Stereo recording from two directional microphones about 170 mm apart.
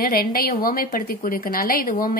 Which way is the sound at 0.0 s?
60° left (ahead or behind).